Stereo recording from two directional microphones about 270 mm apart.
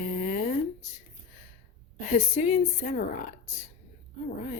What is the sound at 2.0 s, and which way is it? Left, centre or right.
Speech, left.